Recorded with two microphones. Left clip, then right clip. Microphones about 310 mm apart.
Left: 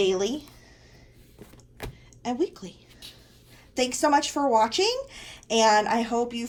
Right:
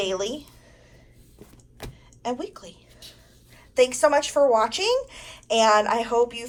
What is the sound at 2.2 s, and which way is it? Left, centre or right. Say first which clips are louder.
Speech: left 1 dB; centre.